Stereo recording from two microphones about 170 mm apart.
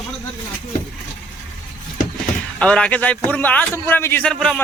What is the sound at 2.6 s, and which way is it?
A man's voice, 5° left (ahead or behind).